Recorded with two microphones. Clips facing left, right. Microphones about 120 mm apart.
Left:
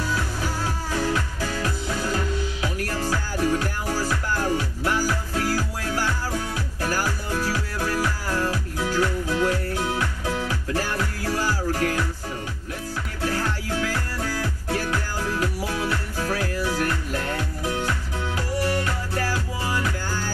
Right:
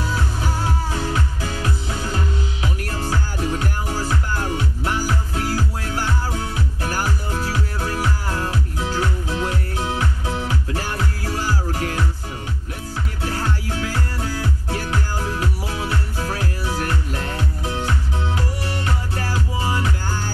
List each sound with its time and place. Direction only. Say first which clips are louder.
0.0 s music: right 2 dB; 25° right (ahead or behind)
13.2 s music: even; 25° right (ahead or behind)